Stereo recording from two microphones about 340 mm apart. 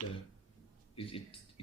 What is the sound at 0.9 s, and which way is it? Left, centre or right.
Speech, centre.